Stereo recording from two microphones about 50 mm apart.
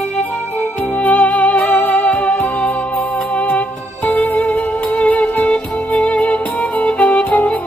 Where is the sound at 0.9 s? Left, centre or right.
Left.